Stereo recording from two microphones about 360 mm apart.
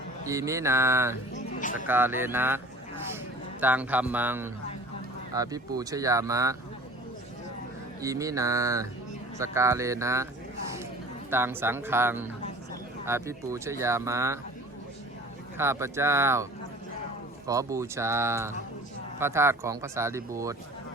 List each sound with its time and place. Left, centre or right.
0.3 s speech: centre
1.4 s a sound: left
1.9 s a man's voice: centre
3.6 s a man's voice: centre
8.0 s speech: centre
11.3 s speech: centre
15.5 s speech: centre